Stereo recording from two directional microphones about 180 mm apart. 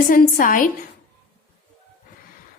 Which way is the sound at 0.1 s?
50° left (ahead or behind).